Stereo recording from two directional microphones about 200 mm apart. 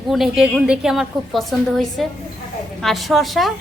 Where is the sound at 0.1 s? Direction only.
Centre (ahead or behind).